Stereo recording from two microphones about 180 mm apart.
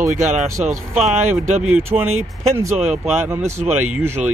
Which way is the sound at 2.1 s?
40° right (ahead or behind).